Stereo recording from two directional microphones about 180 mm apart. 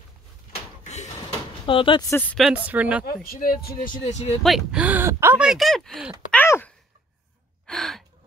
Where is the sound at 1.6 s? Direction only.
30° left (ahead or behind).